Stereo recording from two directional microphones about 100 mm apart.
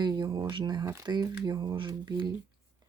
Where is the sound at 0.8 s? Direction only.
30° right (ahead or behind).